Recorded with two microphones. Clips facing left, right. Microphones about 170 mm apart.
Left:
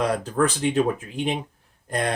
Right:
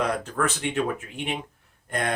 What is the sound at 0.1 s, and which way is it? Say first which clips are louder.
Speech: left 4 dB; 35° left (ahead or behind).